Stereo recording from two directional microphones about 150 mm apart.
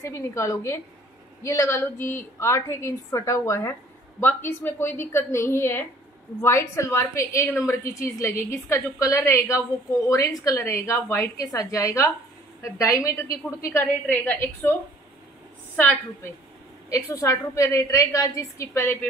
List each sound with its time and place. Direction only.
0.0 s a woman's voice: 20° left (ahead or behind)